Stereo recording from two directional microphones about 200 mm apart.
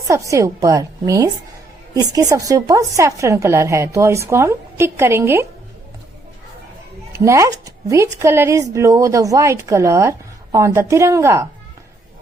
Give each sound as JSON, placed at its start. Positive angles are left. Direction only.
{"t": 0.1, "sound": "speech", "side_deg": -15}
{"t": 7.2, "sound": "speech", "side_deg": -15}